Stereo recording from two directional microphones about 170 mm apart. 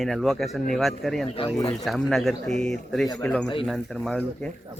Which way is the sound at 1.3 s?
30° left (ahead or behind).